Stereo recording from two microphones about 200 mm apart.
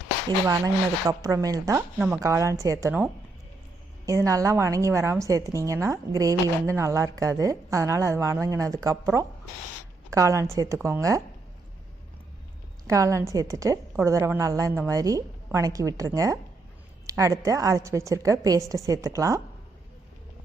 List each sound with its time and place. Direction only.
0.3 s speech: 15° right (ahead or behind)
12.9 s speech: 15° right (ahead or behind)